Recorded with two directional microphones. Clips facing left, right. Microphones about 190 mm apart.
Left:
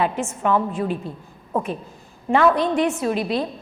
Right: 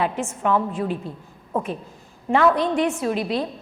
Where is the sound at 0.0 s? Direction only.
20° left (ahead or behind).